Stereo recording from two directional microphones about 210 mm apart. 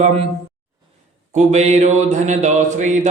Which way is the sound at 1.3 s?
35° right (ahead or behind).